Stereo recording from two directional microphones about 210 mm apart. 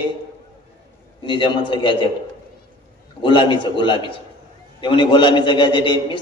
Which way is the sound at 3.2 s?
25° left (ahead or behind).